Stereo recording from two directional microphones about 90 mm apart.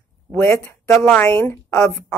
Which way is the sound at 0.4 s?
25° left (ahead or behind).